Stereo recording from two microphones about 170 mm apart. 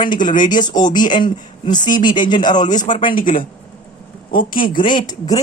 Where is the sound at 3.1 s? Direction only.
30° left (ahead or behind).